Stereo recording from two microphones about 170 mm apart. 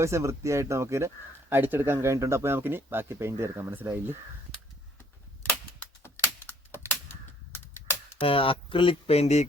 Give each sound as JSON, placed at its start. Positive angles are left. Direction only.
{"t": 0.0, "sound": "speech", "side_deg": -15}
{"t": 5.8, "sound": "computer keyboard", "side_deg": 15}
{"t": 7.5, "sound": "typing", "side_deg": 15}
{"t": 8.2, "sound": "speech", "side_deg": 30}